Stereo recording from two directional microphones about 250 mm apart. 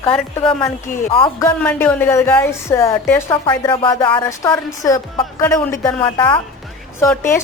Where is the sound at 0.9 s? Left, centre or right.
Left.